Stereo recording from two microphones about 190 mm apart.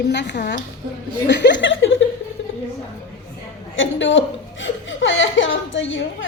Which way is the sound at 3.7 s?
85° left.